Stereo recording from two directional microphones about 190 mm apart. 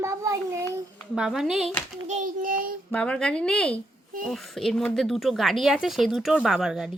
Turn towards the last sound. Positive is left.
turn(degrees=-5)  # may be behind; listen again after turning